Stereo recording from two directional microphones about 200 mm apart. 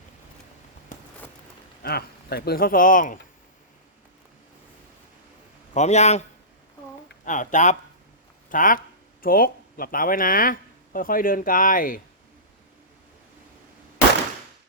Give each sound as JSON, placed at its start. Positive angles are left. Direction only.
{"t": 0.9, "sound": "a sound", "side_deg": 40}
{"t": 1.8, "sound": "speech", "side_deg": 50}
{"t": 5.7, "sound": "speech", "side_deg": 35}
{"t": 7.3, "sound": "speech", "side_deg": 40}